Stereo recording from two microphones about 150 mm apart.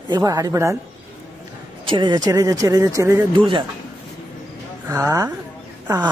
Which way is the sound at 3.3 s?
30° right (ahead or behind).